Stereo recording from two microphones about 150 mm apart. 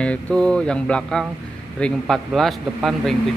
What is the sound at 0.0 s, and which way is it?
Speech, 5° left (ahead or behind).